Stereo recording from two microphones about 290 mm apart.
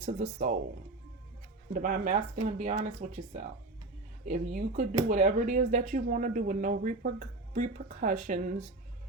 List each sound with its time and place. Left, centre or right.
0.0 s speech: right
1.7 s speech: right